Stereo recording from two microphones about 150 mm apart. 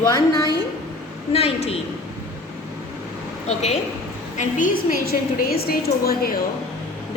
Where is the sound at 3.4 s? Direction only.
50° left (ahead or behind).